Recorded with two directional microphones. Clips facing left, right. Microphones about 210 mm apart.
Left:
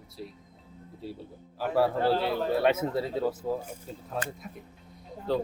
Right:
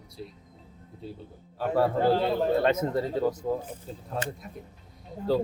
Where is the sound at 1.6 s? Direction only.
5° left (ahead or behind).